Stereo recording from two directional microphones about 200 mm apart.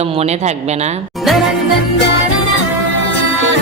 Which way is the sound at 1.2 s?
Centre (ahead or behind).